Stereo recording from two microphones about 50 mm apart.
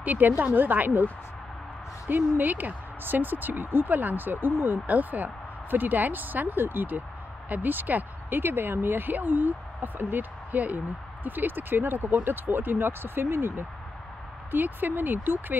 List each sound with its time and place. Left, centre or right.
0.0 s speech: right
2.0 s speech: right
4.8 s speech: right
10.5 s speech: right
14.5 s speech: right